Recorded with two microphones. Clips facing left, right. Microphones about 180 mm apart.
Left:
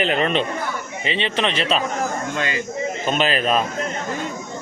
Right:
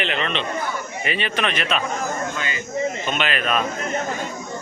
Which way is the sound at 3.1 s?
35° left (ahead or behind).